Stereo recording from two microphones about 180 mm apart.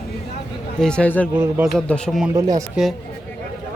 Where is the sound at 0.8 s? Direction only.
5° left (ahead or behind).